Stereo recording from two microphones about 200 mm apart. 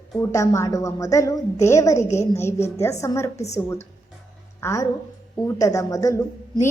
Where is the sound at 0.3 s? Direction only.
15° left (ahead or behind).